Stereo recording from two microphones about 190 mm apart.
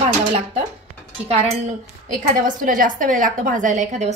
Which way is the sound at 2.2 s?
45° right (ahead or behind).